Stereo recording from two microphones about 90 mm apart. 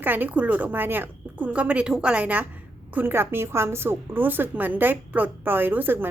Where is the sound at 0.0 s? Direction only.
20° right (ahead or behind).